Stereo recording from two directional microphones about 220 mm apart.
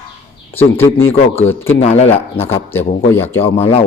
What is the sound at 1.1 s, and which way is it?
Speech, 10° left (ahead or behind).